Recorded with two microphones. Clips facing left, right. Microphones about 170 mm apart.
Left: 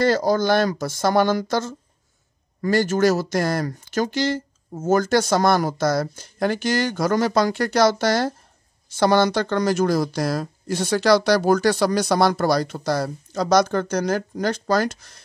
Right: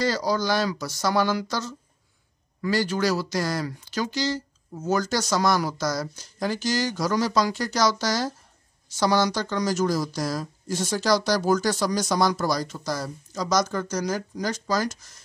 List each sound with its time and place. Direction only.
0.0 s speech: 55° left (ahead or behind)